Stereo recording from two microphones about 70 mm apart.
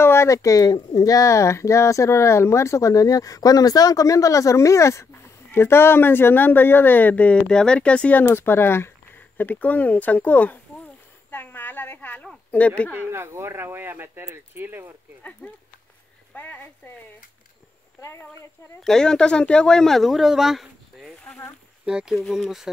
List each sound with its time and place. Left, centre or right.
0.0 s speech: left; by 8.2 s centre
8.2 s speech: left
11.2 s a sound: left
12.4 s speech: centre
12.9 s speech: right
15.4 s speech: centre
16.3 s speech: left
18.8 s speech: centre